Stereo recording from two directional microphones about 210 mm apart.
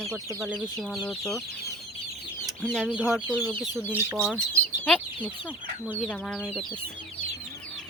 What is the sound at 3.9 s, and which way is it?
Speech, 10° right (ahead or behind).